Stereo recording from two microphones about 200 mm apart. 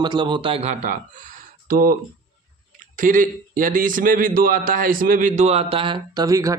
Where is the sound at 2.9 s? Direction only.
40° right (ahead or behind); by 6.6 s 15° right (ahead or behind).